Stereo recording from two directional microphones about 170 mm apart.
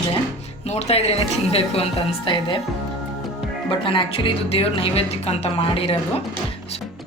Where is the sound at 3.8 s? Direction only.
30° left (ahead or behind).